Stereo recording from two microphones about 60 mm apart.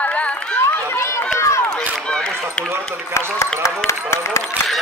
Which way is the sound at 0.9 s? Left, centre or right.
Left.